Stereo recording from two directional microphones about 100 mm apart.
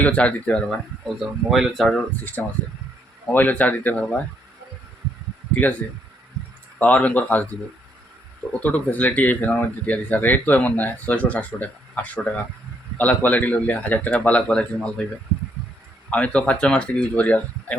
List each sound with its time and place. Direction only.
0.0 s speech: 15° left (ahead or behind)
0.7 s speech: 5° right (ahead or behind); by 4.2 s 15° left (ahead or behind)
6.7 s speech: 15° left (ahead or behind)
8.6 s speech: 15° left (ahead or behind)
16.0 s speech: 10° left (ahead or behind)